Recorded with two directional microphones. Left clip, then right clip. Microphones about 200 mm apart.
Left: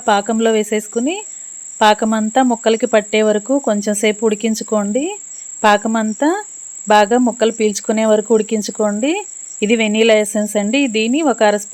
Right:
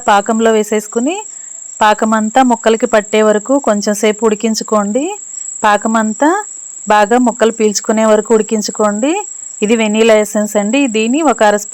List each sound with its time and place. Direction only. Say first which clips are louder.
0.0 s speech: right 4 dB; 15° right (ahead or behind)